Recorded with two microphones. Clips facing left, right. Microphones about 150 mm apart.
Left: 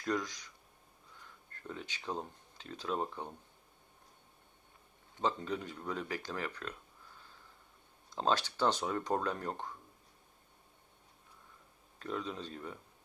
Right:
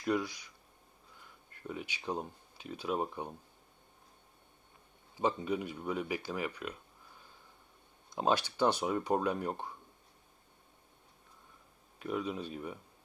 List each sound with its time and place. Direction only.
0.0 s speech: 10° right (ahead or behind)
5.1 s speech: 10° right (ahead or behind)
8.1 s speech: 15° right (ahead or behind)
11.9 s speech: 10° right (ahead or behind)